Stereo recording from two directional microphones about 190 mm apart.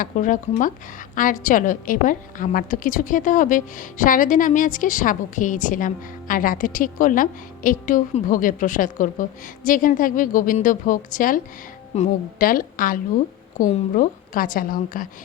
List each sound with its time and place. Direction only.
0.0 s a woman's voice: 45° left (ahead or behind)